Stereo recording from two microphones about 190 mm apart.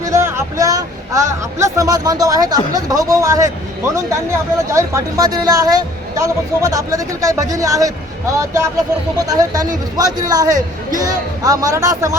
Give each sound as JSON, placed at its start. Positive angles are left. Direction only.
{"t": 0.0, "sound": "a man's voice", "side_deg": -15}